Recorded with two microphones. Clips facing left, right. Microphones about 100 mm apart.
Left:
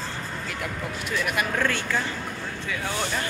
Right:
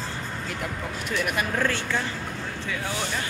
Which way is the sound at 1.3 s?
30° right (ahead or behind).